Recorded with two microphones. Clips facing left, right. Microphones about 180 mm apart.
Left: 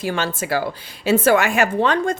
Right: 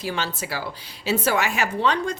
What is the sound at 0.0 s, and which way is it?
A woman's voice, 50° left (ahead or behind).